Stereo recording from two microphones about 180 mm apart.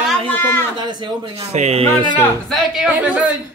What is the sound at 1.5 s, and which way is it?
Speech, 35° right (ahead or behind).